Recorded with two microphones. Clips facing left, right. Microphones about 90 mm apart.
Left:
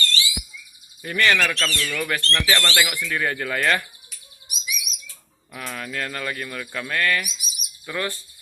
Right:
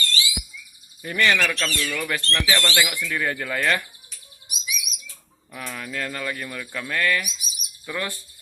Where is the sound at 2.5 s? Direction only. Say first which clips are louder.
Even; 20° left (ahead or behind).